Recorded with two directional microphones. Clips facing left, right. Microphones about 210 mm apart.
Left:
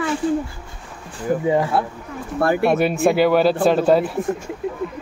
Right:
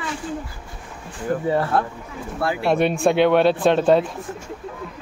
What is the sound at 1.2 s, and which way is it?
Speech, 15° left (ahead or behind).